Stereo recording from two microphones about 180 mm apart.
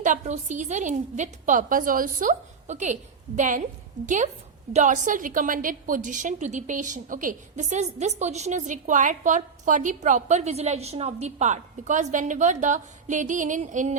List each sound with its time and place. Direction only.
0.0 s a woman's voice: 45° right (ahead or behind)